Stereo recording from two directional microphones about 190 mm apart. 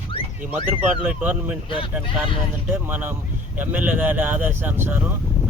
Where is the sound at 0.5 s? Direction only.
10° right (ahead or behind).